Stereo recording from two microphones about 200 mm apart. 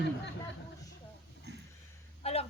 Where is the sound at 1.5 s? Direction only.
55° right (ahead or behind).